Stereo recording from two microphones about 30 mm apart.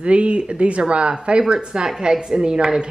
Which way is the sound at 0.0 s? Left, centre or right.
Right.